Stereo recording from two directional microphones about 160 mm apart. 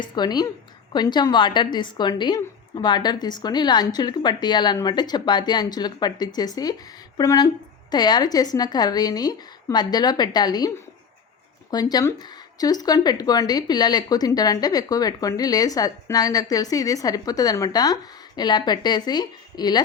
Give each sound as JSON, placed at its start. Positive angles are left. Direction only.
{"t": 0.0, "sound": "a woman's voice", "side_deg": 25}
{"t": 11.7, "sound": "a woman's voice", "side_deg": 25}